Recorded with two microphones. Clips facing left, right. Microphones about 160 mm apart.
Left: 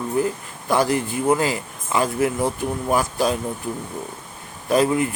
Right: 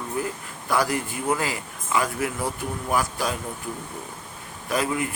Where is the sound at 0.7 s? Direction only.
25° left (ahead or behind).